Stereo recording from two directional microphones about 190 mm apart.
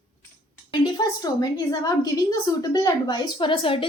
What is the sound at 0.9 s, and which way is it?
A woman's voice, 20° left (ahead or behind).